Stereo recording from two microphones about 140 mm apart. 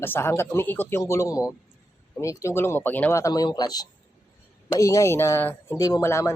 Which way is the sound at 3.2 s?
30° left (ahead or behind).